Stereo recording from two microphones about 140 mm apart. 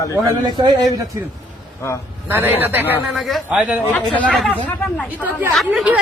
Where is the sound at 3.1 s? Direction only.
Centre (ahead or behind).